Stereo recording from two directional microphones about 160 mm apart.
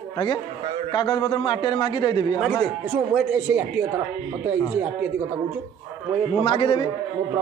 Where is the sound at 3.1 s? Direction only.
5° right (ahead or behind).